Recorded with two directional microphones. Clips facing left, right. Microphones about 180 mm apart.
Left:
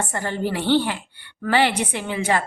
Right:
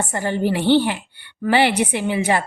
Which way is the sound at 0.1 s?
15° right (ahead or behind).